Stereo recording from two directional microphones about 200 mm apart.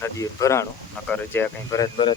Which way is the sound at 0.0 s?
15° left (ahead or behind).